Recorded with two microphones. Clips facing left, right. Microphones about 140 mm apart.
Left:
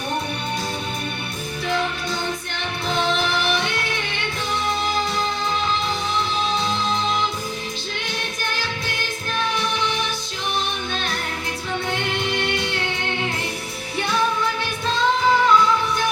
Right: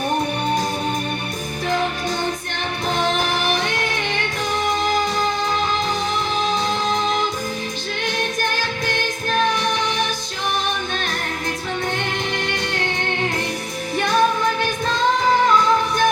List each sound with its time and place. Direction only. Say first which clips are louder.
3.2 s music: right 1 dB; 45° right (ahead or behind)
13.9 s music: right 4 dB; 45° right (ahead or behind)